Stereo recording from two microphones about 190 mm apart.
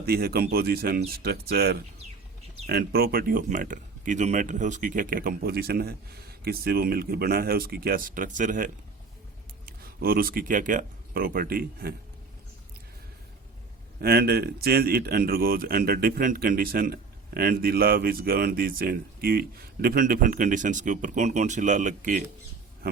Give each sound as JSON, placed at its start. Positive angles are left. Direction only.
{"t": 0.0, "sound": "speech", "side_deg": -55}
{"t": 14.0, "sound": "speech", "side_deg": -55}